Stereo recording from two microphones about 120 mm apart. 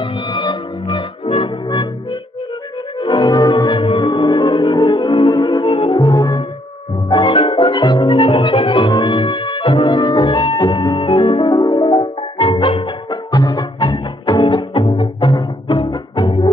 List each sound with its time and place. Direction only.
0.0 s music: 40° left (ahead or behind)
1.2 s music: 50° left (ahead or behind)
3.0 s music: 45° left (ahead or behind)
5.9 s music: 30° left (ahead or behind)
7.1 s music: 40° left (ahead or behind)
13.3 s music: 30° left (ahead or behind)